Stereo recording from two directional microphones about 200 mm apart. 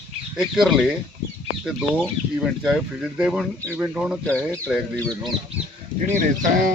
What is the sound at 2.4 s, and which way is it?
Speech, 5° right (ahead or behind).